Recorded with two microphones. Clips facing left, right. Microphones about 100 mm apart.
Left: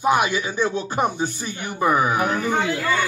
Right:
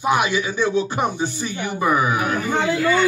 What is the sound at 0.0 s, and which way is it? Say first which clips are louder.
Speech: even; 40° left (ahead or behind).